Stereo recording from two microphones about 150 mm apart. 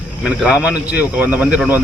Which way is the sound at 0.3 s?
10° right (ahead or behind).